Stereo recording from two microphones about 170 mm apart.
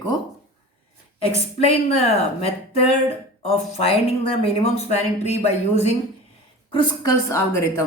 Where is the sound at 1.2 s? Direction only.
35° left (ahead or behind).